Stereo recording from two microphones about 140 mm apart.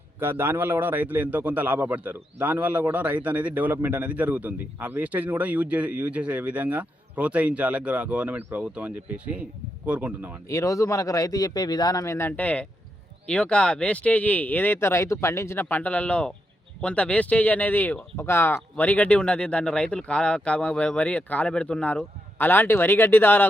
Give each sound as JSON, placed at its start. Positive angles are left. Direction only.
{"t": 0.2, "sound": "a man's voice", "side_deg": -15}
{"t": 10.5, "sound": "a man's voice", "side_deg": 25}